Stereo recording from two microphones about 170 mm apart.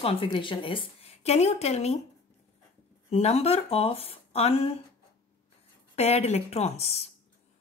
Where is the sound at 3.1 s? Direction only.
40° left (ahead or behind).